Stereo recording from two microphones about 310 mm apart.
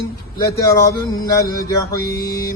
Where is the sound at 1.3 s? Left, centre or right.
Centre.